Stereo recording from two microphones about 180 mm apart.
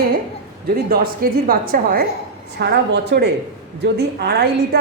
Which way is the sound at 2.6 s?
70° right (ahead or behind).